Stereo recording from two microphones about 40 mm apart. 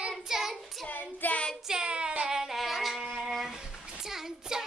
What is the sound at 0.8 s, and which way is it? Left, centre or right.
Child singing, left.